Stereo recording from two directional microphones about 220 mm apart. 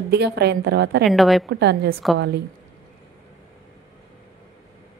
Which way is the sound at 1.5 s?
50° right (ahead or behind).